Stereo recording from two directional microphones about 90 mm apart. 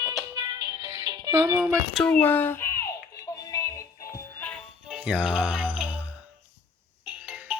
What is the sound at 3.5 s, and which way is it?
Music, 35° left (ahead or behind).